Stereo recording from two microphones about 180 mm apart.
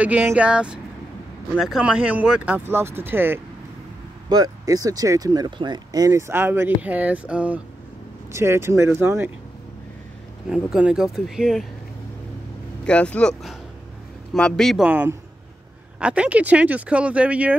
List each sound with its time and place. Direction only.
0.0 s speech: 10° right (ahead or behind)
10.5 s speech: 5° right (ahead or behind)
12.8 s speech: 5° left (ahead or behind)